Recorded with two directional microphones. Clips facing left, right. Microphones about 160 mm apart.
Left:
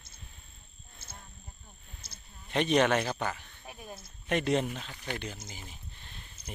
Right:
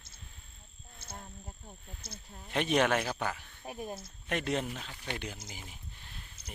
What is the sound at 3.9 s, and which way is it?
Speech, centre (ahead or behind).